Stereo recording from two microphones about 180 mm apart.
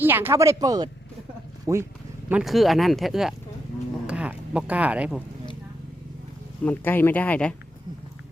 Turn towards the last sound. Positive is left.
turn(degrees=5)  # may be behind; listen again after turning